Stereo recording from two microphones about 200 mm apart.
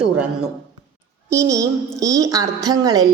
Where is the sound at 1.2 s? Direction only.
15° right (ahead or behind).